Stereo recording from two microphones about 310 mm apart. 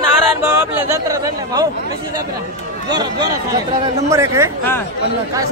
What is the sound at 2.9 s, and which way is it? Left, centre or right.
A man's voice, centre.